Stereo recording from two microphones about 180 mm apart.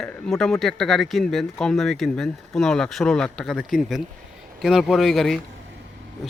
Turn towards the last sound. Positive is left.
turn(degrees=0)  # may be behind; listen again after turning